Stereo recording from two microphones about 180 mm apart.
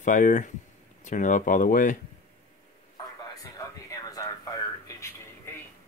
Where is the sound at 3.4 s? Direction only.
20° left (ahead or behind).